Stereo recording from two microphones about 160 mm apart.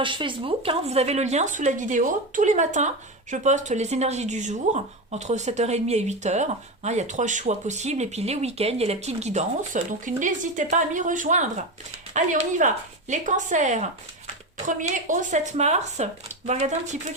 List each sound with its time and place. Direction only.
0.0 s speech: 30° right (ahead or behind); by 17.0 s 45° right (ahead or behind)